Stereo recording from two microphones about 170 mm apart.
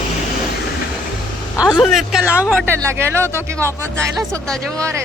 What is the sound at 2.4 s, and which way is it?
Speech, 15° right (ahead or behind).